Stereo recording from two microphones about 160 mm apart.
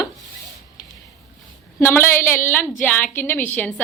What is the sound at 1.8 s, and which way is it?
A woman's voice, 15° left (ahead or behind).